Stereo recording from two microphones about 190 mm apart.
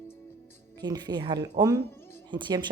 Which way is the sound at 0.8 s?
20° right (ahead or behind).